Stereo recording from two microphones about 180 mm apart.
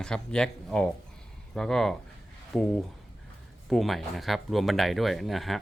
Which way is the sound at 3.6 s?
Centre (ahead or behind).